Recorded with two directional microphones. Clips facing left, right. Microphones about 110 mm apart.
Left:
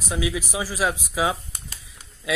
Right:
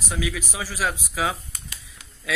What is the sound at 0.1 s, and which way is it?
Speech, 15° left (ahead or behind).